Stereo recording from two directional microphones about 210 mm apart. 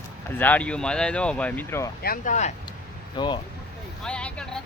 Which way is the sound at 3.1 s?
20° left (ahead or behind).